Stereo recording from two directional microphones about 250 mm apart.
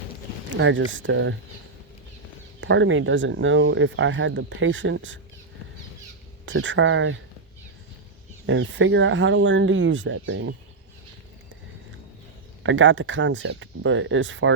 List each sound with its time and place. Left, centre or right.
0.5 s speech: right
2.6 s speech: right
6.4 s speech: right
8.4 s speech: right
12.6 s speech: right